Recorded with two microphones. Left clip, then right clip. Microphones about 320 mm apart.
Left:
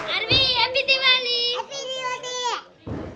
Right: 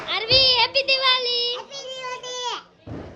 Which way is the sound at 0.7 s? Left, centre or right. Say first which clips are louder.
Left 1 dB; centre.